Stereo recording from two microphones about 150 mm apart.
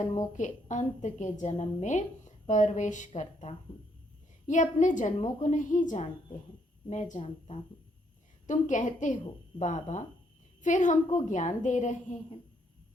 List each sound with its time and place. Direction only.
0.3 s a woman's voice: 55° left (ahead or behind)
8.4 s a woman's voice: 55° left (ahead or behind)